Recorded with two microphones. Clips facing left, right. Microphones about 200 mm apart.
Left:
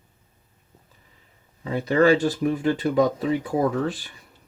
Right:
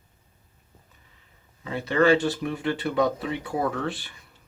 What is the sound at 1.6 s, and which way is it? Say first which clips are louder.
Speech: left 3 dB; 35° left (ahead or behind).